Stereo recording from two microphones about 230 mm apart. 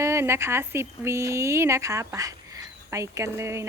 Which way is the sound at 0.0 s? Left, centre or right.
Centre.